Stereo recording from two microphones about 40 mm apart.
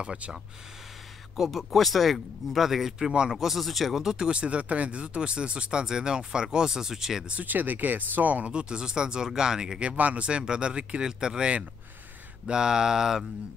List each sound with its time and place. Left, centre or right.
0.0 s speech: right
1.3 s speech: centre
3.0 s speech: right
3.3 s speech: centre
4.0 s speech: centre
7.4 s speech: right
8.5 s speech: right
9.8 s speech: right
11.1 s mantra: centre